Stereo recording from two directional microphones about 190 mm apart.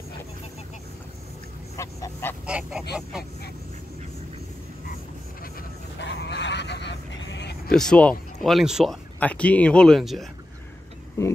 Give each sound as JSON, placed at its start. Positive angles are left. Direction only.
{"t": 1.8, "sound": "goose", "side_deg": 15}
{"t": 2.4, "sound": "speech", "side_deg": -5}
{"t": 5.9, "sound": "a sound", "side_deg": 65}
{"t": 7.7, "sound": "speech", "side_deg": 5}
{"t": 11.2, "sound": "speech", "side_deg": 15}